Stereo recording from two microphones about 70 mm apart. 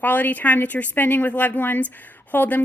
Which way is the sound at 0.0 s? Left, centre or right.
Left.